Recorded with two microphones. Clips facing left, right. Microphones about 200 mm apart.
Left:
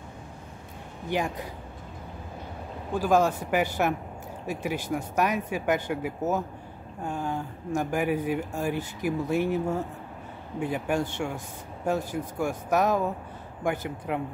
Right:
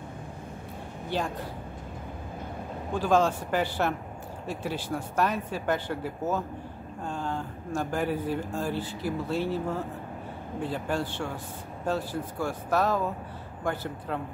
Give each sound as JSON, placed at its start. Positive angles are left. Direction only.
{"t": 2.9, "sound": "speech", "side_deg": 10}